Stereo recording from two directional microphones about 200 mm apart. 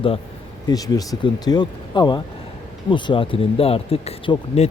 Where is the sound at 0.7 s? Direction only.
20° left (ahead or behind).